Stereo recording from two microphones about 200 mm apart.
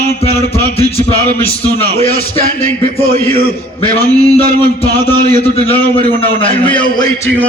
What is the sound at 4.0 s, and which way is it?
Speech, 20° right (ahead or behind).